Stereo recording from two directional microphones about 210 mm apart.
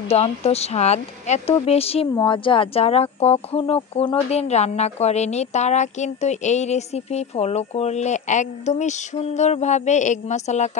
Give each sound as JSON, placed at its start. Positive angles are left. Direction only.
{"t": 0.1, "sound": "speech", "side_deg": 30}